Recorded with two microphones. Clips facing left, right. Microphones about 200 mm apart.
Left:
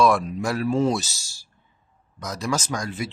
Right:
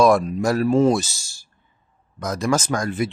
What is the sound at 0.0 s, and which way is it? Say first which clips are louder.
Speech: right 4 dB; 40° right (ahead or behind).